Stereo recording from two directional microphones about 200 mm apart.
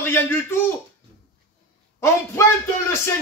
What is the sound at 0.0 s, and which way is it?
Speech, 10° left (ahead or behind).